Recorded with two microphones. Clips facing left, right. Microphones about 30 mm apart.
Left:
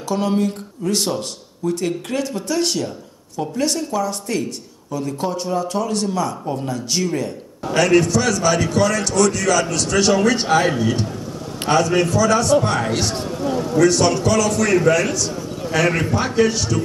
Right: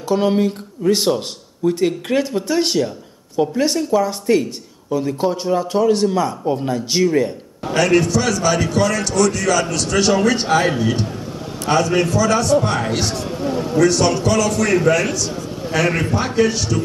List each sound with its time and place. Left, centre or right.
0.1 s a man's voice: centre
7.7 s a man's voice: centre